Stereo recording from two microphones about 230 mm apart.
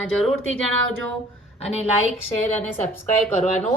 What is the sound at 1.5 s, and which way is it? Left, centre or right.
Speech, left.